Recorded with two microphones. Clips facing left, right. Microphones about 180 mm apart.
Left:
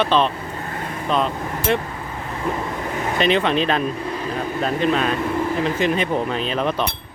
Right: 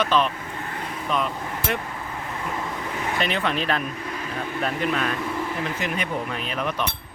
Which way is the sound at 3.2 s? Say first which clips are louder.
Left 8 dB; 20° left (ahead or behind).